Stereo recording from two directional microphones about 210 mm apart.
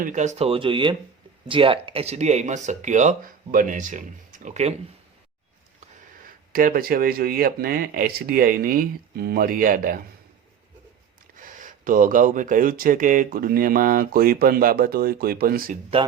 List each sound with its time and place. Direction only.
0.0 s speech: 35° right (ahead or behind)
6.2 s speech: 40° right (ahead or behind)
11.3 s speech: 40° right (ahead or behind)